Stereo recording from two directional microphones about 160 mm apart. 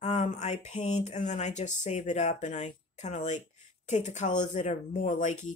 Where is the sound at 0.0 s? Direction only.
45° left (ahead or behind).